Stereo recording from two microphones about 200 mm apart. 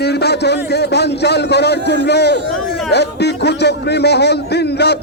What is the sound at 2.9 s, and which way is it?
A man's voice, 55° left (ahead or behind).